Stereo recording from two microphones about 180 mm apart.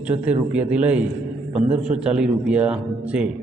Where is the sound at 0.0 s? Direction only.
10° right (ahead or behind).